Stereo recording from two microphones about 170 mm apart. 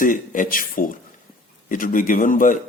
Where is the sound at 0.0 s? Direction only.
50° left (ahead or behind).